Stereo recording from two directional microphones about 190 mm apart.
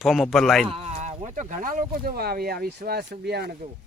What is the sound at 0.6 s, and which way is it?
Speech, 30° right (ahead or behind).